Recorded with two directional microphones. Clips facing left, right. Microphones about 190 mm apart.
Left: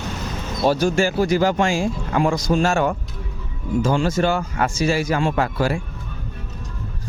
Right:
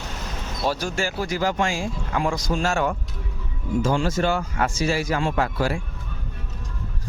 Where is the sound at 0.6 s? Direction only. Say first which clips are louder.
Left 7 dB; 60° left (ahead or behind).